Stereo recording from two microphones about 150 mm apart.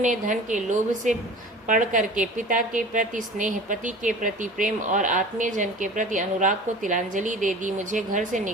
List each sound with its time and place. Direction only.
0.0 s a woman's voice: 55° right (ahead or behind)